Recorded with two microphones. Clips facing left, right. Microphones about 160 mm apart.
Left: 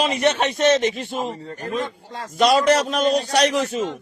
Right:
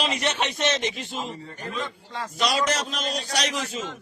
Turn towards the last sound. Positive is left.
turn(degrees=55)  # may be behind; listen again after turning